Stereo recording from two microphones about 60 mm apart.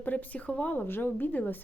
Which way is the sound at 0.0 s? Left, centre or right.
Left.